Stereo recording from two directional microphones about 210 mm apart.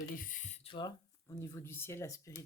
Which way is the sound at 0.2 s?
40° left (ahead or behind).